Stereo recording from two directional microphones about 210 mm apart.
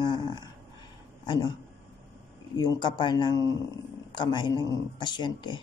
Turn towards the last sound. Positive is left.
turn(degrees=20)  # may be behind; listen again after turning